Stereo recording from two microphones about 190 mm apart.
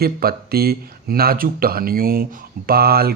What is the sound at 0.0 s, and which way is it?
Speech, 55° right (ahead or behind).